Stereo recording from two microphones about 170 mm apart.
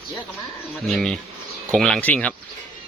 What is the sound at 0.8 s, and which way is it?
Speech, centre (ahead or behind).